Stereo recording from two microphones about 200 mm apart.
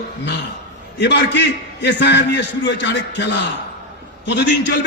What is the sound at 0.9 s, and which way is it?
A man's voice, 60° left (ahead or behind).